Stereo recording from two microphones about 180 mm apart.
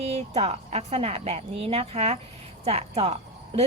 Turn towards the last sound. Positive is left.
turn(degrees=-35)  # may be behind; listen again after turning